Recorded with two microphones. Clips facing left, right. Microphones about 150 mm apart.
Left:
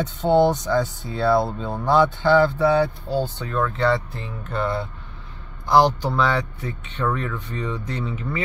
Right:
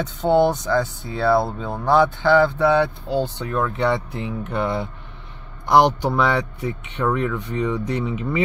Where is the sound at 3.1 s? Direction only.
15° right (ahead or behind).